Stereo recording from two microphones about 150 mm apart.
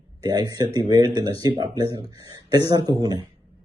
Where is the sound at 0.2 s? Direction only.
25° right (ahead or behind).